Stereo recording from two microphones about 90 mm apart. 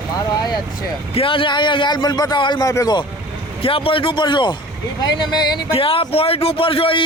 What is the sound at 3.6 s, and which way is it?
A man's voice, 90° left.